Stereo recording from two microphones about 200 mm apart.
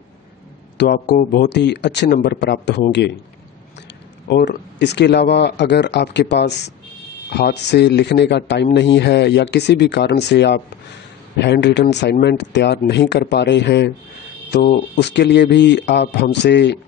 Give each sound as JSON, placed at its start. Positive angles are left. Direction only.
{"t": 0.7, "sound": "speech", "side_deg": 55}
{"t": 4.3, "sound": "speech", "side_deg": 60}